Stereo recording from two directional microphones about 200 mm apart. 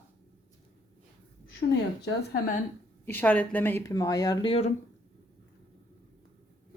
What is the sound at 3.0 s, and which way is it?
Speech, 10° left (ahead or behind).